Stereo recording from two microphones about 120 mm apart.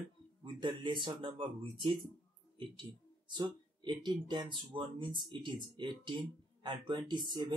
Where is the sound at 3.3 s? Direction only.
40° right (ahead or behind).